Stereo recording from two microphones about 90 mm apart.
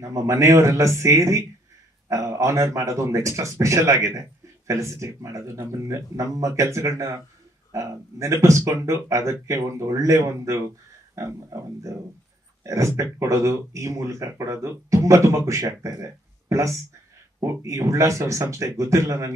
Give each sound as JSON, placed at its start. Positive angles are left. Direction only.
{"t": 0.0, "sound": "speech", "side_deg": -35}